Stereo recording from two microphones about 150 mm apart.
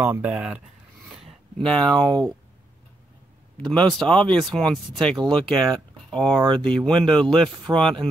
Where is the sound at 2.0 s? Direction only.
25° right (ahead or behind).